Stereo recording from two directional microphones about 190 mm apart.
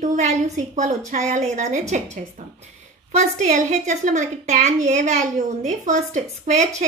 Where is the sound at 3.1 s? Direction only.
40° right (ahead or behind).